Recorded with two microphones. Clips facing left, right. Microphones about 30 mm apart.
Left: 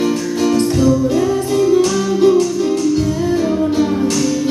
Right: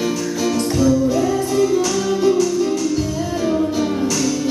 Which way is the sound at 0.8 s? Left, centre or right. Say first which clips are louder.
Left 2 dB; left.